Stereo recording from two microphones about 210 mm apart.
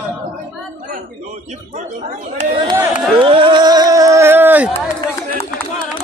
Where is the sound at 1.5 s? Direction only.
35° right (ahead or behind).